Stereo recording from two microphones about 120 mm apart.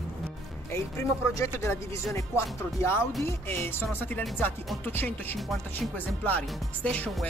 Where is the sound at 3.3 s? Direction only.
20° left (ahead or behind).